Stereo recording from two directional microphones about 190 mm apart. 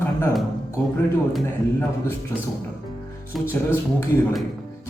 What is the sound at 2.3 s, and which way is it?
Speech, 15° left (ahead or behind).